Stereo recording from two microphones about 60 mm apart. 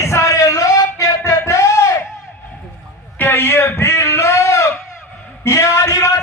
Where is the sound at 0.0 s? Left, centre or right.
Left.